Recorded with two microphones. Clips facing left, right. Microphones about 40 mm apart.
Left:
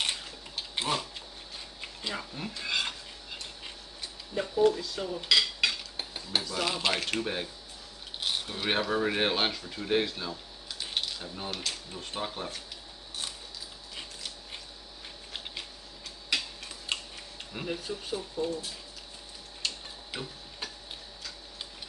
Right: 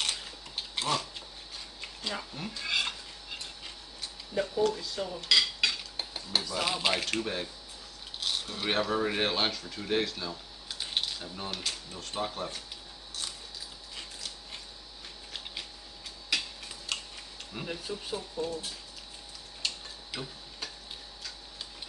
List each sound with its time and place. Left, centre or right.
0.7 s a sound: centre
1.8 s dishes: centre
4.4 s speech: centre
5.3 s cutlery: centre
8.2 s speech: centre
10.8 s a sound: centre
11.9 s speech: centre
13.9 s a sound: centre
16.3 s a sound: centre
16.9 s tick-tock: left
17.5 s speech: centre
20.1 s tick-tock: centre